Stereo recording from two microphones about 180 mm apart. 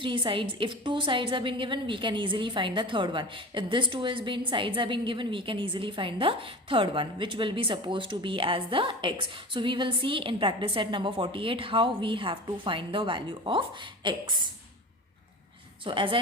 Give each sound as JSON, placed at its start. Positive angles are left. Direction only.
{"t": 0.0, "sound": "a woman's voice", "side_deg": -25}
{"t": 15.8, "sound": "a woman's voice", "side_deg": -30}